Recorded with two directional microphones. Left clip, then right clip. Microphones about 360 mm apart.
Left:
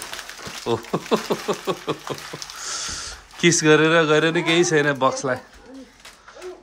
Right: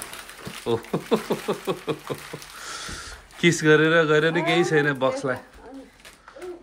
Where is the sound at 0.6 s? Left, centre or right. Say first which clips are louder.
Left 2 dB; centre.